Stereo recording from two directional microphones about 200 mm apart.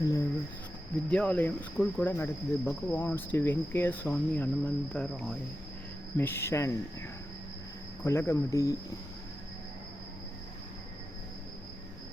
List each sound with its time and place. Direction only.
0.0 s cricket: 15° left (ahead or behind)
1.1 s speech: 5° left (ahead or behind)
8.0 s speech: 15° left (ahead or behind)